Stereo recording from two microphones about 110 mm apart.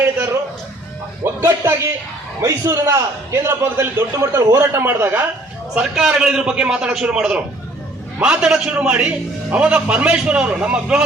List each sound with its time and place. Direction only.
1.2 s a man's voice: 25° right (ahead or behind)
5.7 s a man's voice: 5° right (ahead or behind)